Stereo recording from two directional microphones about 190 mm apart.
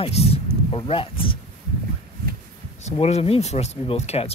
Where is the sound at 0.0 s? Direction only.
30° left (ahead or behind).